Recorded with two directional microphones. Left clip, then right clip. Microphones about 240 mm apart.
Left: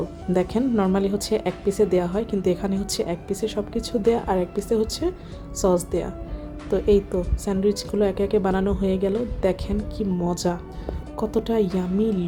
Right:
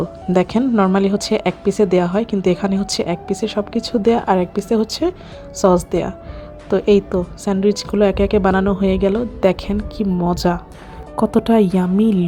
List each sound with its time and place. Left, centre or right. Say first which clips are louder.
0.3 s a woman's voice: right 6 dB; centre